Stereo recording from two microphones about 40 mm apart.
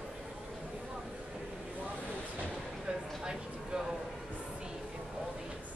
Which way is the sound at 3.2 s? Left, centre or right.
Centre.